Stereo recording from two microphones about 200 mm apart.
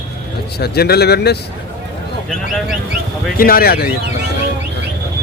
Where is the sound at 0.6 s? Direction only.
50° left (ahead or behind).